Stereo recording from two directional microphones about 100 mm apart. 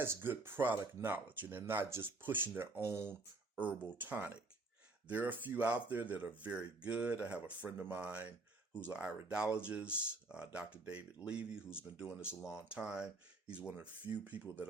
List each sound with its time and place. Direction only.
0.0 s speech: 20° right (ahead or behind)
3.5 s speech: 15° right (ahead or behind)